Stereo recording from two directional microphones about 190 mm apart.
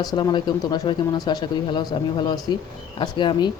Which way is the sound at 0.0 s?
20° left (ahead or behind).